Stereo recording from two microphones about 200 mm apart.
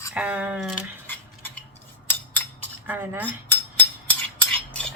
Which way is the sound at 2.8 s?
10° right (ahead or behind).